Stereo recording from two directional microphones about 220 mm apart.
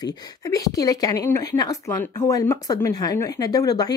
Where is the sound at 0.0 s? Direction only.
15° left (ahead or behind).